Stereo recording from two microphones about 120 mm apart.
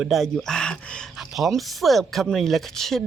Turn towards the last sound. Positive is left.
turn(degrees=0)  # may be behind; listen again after turning